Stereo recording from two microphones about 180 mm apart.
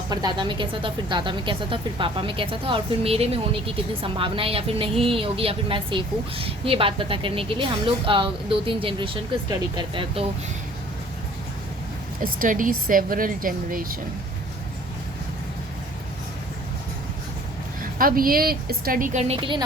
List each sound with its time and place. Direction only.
0.1 s a woman's voice: 25° right (ahead or behind)
12.2 s a woman's voice: 50° right (ahead or behind)
17.9 s a woman's voice: 50° right (ahead or behind); by 19.6 s 25° right (ahead or behind)